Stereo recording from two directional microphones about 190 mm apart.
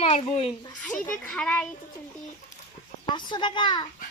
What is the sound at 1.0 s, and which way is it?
Speech, 5° left (ahead or behind).